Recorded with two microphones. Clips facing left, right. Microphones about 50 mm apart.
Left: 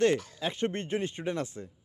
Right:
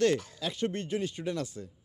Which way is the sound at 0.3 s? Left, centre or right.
Left.